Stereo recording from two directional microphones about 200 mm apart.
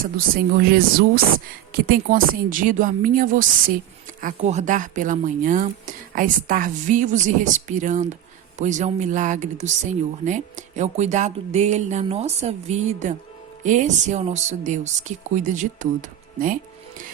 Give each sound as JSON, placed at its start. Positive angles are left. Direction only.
{"t": 0.0, "sound": "speech", "side_deg": -45}